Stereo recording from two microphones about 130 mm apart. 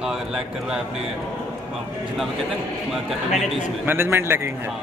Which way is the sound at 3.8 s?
20° right (ahead or behind).